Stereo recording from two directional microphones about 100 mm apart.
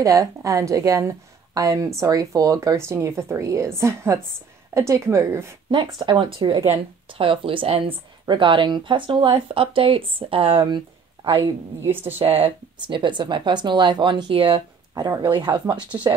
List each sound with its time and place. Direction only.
0.0 s a woman's voice: 35° right (ahead or behind)
5.7 s speech: 55° right (ahead or behind); by 7.8 s 75° right (ahead or behind)
8.3 s speech: 55° right (ahead or behind)
12.2 s speech: 80° right
12.8 s speech: 50° right (ahead or behind)
15.0 s a woman's voice: 40° right (ahead or behind)
15.3 s speech: 50° right (ahead or behind)